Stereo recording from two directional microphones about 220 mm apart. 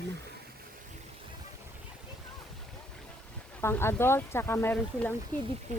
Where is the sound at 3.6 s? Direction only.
10° left (ahead or behind).